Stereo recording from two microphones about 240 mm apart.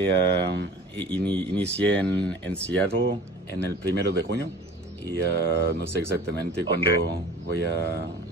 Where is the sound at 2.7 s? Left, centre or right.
Right.